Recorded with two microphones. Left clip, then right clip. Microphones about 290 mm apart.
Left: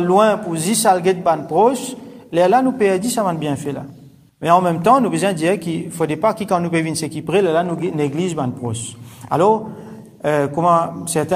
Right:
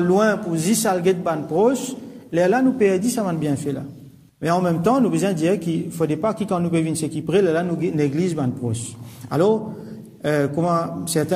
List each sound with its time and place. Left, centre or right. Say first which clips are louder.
0.2 s a man's voice: left 4 dB; centre